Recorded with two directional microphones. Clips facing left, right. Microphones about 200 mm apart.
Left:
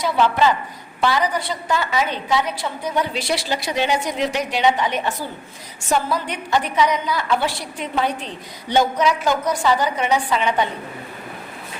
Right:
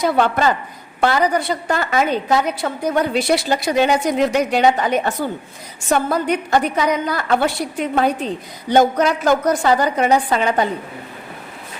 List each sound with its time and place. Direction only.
0.1 s a woman's voice: 50° right (ahead or behind)
5.9 s a woman's voice: 50° right (ahead or behind)
7.8 s a woman's voice: 40° right (ahead or behind)
8.7 s a woman's voice: 50° right (ahead or behind)